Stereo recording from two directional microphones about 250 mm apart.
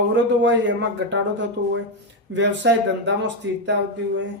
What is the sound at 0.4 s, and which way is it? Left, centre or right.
Speech, right.